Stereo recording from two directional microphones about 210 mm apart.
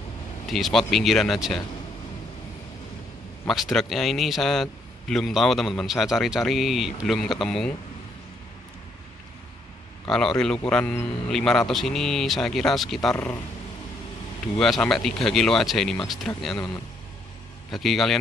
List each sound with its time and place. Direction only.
0.5 s a man's voice: centre (ahead or behind)
3.4 s a man's voice: centre (ahead or behind)
10.0 s a man's voice: 5° left (ahead or behind)
14.6 s a man's voice: centre (ahead or behind)